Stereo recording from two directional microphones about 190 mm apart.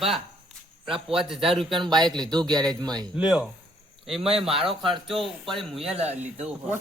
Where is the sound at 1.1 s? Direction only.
Centre (ahead or behind).